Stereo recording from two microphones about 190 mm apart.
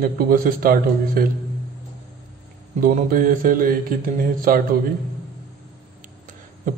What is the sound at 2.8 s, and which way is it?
A man's voice, 45° right (ahead or behind).